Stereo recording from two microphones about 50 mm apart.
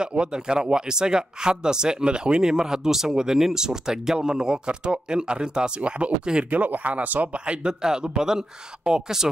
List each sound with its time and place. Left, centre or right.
0.0 s speech: centre
6.5 s speech: right; by 9.3 s centre